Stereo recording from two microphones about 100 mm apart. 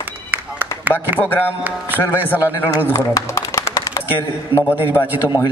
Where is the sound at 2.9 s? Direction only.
30° left (ahead or behind).